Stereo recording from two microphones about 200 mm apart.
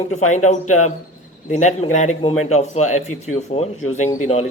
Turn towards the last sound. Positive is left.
turn(degrees=30)  # may be behind; listen again after turning